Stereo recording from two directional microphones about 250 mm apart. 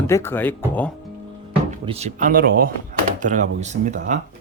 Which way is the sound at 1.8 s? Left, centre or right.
Right.